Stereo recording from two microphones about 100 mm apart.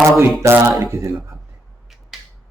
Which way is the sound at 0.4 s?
30° right (ahead or behind).